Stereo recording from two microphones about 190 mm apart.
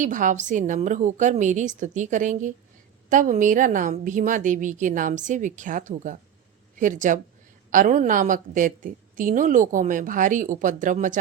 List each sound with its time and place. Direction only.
0.0 s a woman's voice: 40° right (ahead or behind)